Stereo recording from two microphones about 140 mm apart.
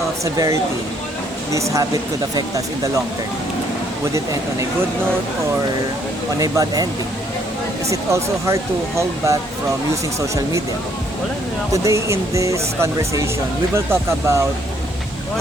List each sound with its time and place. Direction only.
0.3 s speech: 25° right (ahead or behind)
6.4 s speech: 25° right (ahead or behind)
7.9 s speech: 20° right (ahead or behind)
11.7 s speech: 20° right (ahead or behind)